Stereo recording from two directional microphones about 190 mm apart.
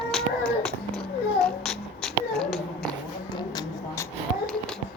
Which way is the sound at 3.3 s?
20° left (ahead or behind).